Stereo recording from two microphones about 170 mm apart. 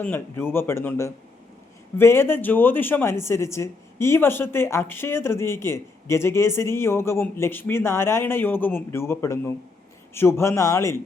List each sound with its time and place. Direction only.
0.0 s speech: 10° left (ahead or behind)